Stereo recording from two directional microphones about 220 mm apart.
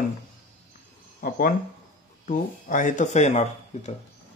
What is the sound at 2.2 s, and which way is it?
Speech, 35° left (ahead or behind).